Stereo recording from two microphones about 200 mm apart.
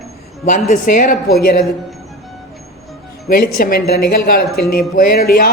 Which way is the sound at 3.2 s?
45° left (ahead or behind).